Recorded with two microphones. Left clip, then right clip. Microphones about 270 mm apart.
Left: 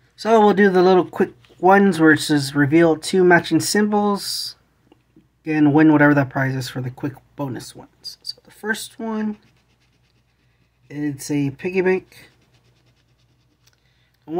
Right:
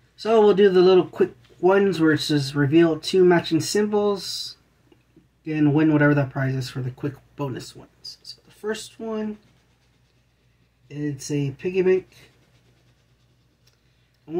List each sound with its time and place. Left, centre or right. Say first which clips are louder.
0.2 s speech: left 2 dB; left
5.4 s speech: left 5 dB; left
10.9 s speech: left 4 dB; left